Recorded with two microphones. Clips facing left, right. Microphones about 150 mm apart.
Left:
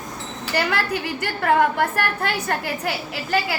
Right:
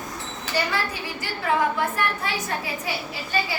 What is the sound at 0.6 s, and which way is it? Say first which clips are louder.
A woman's voice: left 4 dB; 65° left (ahead or behind).